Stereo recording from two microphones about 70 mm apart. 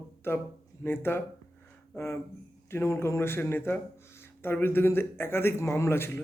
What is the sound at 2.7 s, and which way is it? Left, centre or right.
A man's voice, left.